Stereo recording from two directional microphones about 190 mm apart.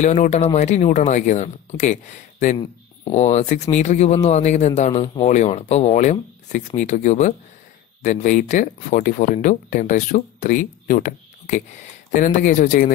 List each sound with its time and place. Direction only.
0.0 s speech: 40° left (ahead or behind)
3.1 s speech: 35° left (ahead or behind)